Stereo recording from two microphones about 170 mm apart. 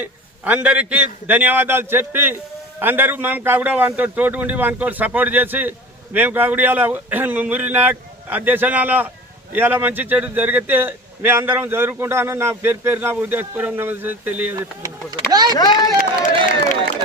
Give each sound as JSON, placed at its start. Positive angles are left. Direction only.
{"t": 0.0, "sound": "a man's voice", "side_deg": -10}
{"t": 15.3, "sound": "speech", "side_deg": -25}
{"t": 15.5, "sound": "speech", "side_deg": 25}
{"t": 16.2, "sound": "speech", "side_deg": 45}